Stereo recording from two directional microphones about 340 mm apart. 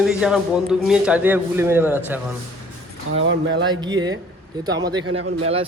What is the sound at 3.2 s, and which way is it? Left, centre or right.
Speech, right.